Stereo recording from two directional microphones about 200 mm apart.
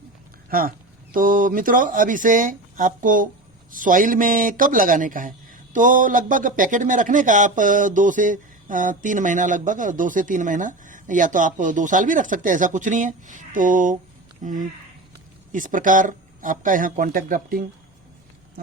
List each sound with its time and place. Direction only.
0.5 s speech: 45° right (ahead or behind)